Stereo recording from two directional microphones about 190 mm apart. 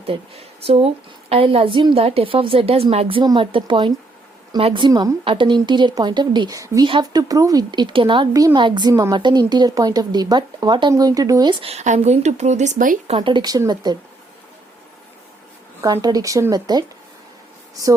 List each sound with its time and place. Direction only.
0.1 s a woman's voice: 30° right (ahead or behind)
13.1 s a woman's voice: 30° right (ahead or behind)
15.8 s a woman's voice: 20° right (ahead or behind)